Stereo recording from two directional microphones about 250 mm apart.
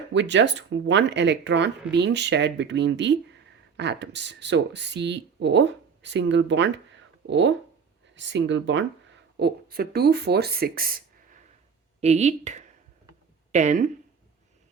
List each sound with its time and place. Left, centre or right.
0.1 s speech: right
11.9 s a woman's voice: right